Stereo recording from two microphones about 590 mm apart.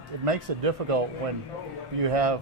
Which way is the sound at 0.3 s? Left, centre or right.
Right.